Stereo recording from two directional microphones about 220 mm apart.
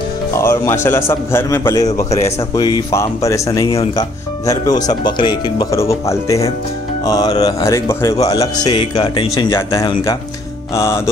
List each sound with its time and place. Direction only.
0.3 s a man's voice: 10° left (ahead or behind)
2.0 s speech: 30° left (ahead or behind)
2.5 s a man's voice: 15° left (ahead or behind)
10.7 s music: 10° left (ahead or behind)